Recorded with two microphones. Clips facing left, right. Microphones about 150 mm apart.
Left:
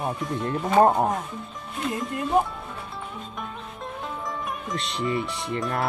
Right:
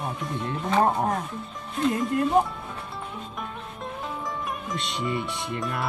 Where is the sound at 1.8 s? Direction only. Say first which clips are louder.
Right 5 dB; centre (ahead or behind).